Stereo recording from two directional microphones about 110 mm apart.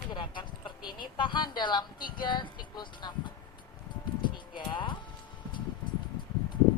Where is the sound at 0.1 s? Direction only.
45° left (ahead or behind).